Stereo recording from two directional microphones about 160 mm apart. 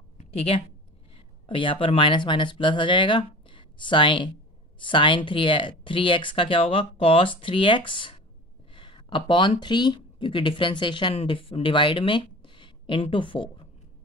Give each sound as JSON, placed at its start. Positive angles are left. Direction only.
{"t": 0.2, "sound": "speech", "side_deg": 40}